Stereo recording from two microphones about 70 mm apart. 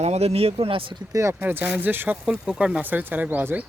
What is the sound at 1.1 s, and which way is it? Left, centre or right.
Speech, right.